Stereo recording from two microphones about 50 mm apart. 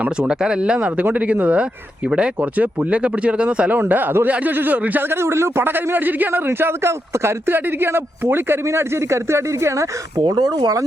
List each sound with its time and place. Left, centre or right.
0.0 s speech: right
0.8 s speech: right
3.8 s speech: right
5.0 s a man's voice: right
7.1 s a man's voice: right
8.6 s speech: right